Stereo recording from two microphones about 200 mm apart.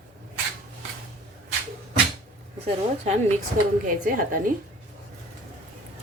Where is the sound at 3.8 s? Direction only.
45° right (ahead or behind).